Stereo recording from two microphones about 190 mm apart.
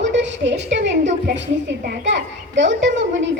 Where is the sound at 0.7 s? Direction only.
70° right (ahead or behind).